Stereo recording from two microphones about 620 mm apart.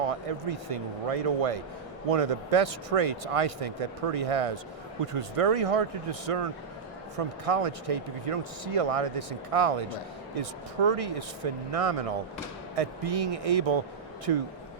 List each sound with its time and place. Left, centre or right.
0.0 s a man's voice: right